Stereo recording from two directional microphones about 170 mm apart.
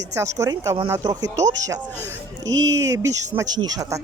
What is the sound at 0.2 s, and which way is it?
Speech, 20° right (ahead or behind).